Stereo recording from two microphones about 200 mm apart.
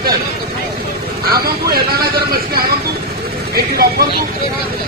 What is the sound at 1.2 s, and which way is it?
Speech, 50° right (ahead or behind).